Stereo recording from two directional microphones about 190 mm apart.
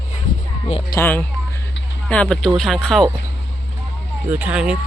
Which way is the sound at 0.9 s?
10° left (ahead or behind).